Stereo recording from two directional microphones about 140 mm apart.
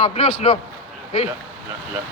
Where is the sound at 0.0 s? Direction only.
45° left (ahead or behind).